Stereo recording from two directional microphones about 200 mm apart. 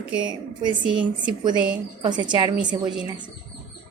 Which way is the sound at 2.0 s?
20° right (ahead or behind).